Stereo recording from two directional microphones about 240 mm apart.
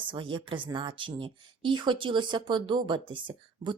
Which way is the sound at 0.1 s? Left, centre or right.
Right.